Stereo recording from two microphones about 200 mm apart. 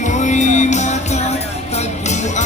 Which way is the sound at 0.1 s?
35° left (ahead or behind).